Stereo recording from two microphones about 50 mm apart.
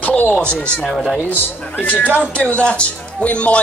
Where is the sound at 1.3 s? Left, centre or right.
Left.